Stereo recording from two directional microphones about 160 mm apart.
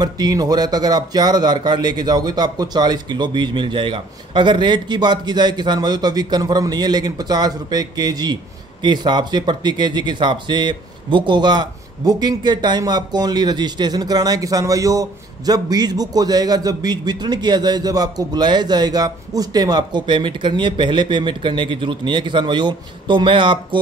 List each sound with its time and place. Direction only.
0.0 s speech: 25° right (ahead or behind)